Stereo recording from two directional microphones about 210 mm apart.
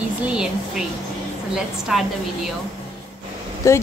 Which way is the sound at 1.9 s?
Centre (ahead or behind).